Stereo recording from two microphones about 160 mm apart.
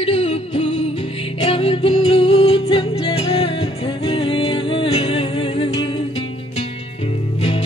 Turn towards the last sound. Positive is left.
turn(degrees=35)  # may be behind; listen again after turning